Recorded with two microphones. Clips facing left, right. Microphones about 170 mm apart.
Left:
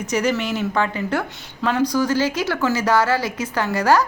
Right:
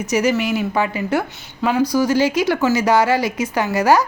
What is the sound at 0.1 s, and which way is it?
A woman's voice, 10° right (ahead or behind).